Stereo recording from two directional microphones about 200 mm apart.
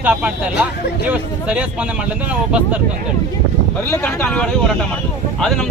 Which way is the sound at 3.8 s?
10° left (ahead or behind).